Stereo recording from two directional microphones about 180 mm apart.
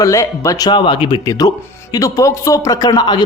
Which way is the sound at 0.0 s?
20° left (ahead or behind).